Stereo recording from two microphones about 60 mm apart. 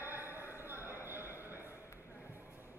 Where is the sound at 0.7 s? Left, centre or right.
Right.